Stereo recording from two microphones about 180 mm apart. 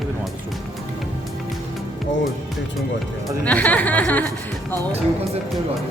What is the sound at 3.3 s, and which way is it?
Speech, 10° left (ahead or behind).